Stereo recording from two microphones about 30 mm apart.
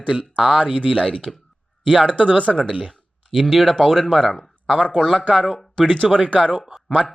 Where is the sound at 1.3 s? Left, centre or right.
Centre.